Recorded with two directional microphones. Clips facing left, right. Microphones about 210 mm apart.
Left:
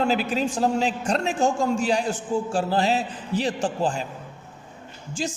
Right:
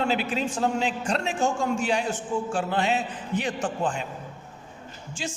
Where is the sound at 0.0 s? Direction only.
40° left (ahead or behind).